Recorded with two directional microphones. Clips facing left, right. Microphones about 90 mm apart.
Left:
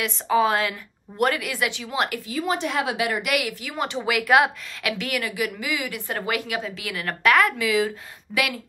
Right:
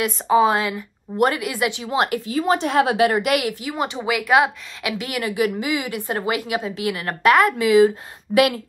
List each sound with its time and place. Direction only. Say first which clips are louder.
0.3 s speech: right 3 dB; 20° right (ahead or behind); by 3.5 s 35° right (ahead or behind)
3.8 s speech: right 1 dB; 5° right (ahead or behind)
5.0 s speech: right 7 dB; 25° right (ahead or behind)